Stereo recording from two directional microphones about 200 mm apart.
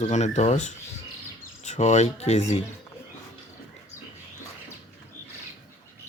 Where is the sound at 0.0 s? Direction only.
35° left (ahead or behind).